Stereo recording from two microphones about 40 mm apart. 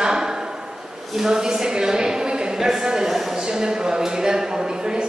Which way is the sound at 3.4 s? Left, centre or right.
Centre.